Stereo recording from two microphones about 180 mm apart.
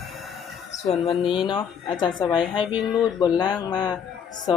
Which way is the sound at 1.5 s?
25° left (ahead or behind).